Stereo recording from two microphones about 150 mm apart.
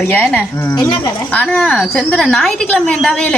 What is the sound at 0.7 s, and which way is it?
Speech, 25° left (ahead or behind).